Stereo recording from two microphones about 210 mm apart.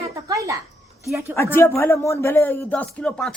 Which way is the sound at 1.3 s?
10° left (ahead or behind).